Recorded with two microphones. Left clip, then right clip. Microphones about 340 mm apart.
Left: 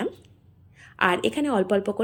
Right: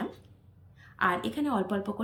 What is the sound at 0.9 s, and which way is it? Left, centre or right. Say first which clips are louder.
A woman's voice: left 6 dB; centre.